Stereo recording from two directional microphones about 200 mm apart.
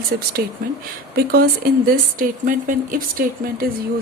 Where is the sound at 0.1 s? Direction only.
55° right (ahead or behind).